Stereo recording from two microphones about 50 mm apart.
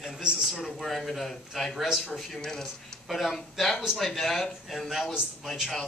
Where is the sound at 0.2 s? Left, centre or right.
Centre.